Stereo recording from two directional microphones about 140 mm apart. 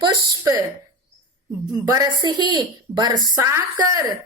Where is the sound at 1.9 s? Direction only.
30° right (ahead or behind).